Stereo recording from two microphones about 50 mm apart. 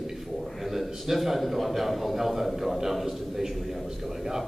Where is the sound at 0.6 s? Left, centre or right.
Centre.